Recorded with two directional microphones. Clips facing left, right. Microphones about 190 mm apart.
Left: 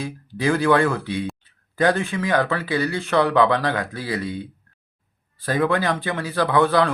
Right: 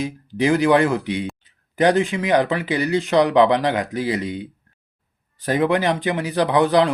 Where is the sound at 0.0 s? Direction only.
20° right (ahead or behind).